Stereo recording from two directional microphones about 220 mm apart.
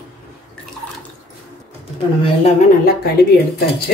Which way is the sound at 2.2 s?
30° left (ahead or behind).